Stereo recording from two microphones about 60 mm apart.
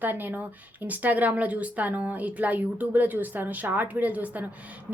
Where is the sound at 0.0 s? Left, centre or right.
Right.